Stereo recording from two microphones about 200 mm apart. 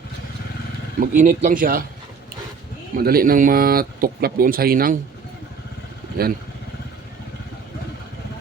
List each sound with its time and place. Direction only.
0.9 s speech: 40° right (ahead or behind)
2.9 s speech: 50° right (ahead or behind)
6.2 s speech: 50° right (ahead or behind)